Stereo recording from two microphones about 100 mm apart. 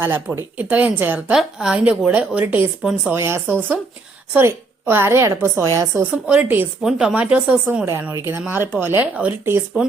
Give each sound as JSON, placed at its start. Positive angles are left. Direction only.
{"t": 0.0, "sound": "speech", "side_deg": -20}
{"t": 1.3, "sound": "a woman's voice", "side_deg": -5}
{"t": 6.0, "sound": "a woman's voice", "side_deg": -15}